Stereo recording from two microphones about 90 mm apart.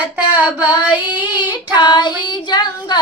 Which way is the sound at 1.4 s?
55° left (ahead or behind).